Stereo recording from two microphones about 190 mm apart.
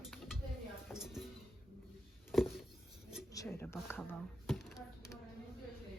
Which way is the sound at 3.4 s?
10° left (ahead or behind).